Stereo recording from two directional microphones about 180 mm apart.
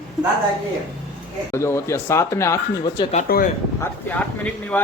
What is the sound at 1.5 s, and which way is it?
Speech, 15° left (ahead or behind).